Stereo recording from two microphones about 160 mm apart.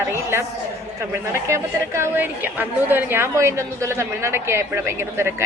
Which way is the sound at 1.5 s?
15° right (ahead or behind).